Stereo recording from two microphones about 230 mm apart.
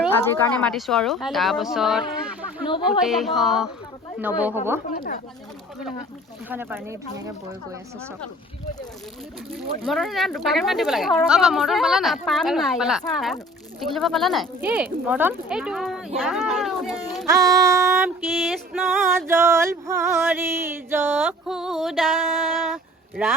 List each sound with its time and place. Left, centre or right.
0.3 s speech: centre
2.6 s speech: left
3.0 s speech: centre
4.2 s music: centre
4.9 s speech: left
6.5 s music: centre
9.5 s speech: centre
17.2 s a sound: centre
18.3 s music: centre